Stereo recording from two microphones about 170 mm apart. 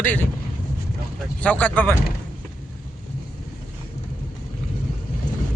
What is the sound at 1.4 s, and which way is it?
Speech, 10° left (ahead or behind).